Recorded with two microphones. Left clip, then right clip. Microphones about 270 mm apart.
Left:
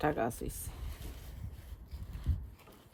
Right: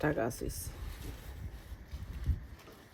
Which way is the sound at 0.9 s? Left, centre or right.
Centre.